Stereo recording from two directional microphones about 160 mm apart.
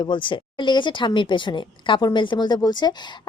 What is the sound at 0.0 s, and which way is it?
Speech, 30° left (ahead or behind).